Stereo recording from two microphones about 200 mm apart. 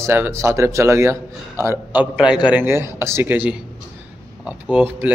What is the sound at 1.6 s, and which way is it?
A man's voice, 10° right (ahead or behind).